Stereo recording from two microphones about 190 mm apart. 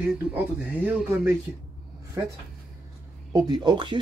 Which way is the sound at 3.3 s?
20° right (ahead or behind).